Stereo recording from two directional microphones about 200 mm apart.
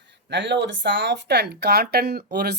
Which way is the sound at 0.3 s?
60° right (ahead or behind).